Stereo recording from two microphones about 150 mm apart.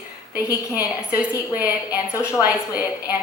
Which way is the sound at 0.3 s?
20° left (ahead or behind).